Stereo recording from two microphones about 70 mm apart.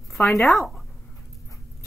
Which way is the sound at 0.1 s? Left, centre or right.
Centre.